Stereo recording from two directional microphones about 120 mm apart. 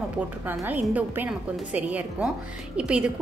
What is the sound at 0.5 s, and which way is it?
A woman's voice, 15° right (ahead or behind).